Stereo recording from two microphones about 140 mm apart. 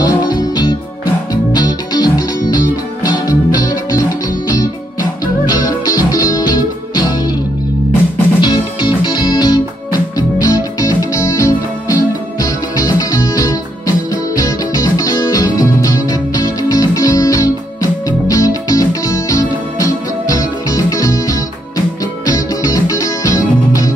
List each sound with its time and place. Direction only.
0.0 s music: 30° left (ahead or behind)
5.2 s music: 25° left (ahead or behind)
8.4 s music: 30° left (ahead or behind)